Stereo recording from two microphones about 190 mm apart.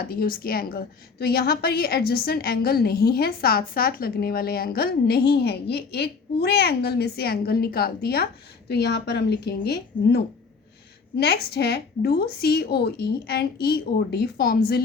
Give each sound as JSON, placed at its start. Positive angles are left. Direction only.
{"t": 0.0, "sound": "a woman's voice", "side_deg": 50}
{"t": 11.2, "sound": "a woman's voice", "side_deg": 55}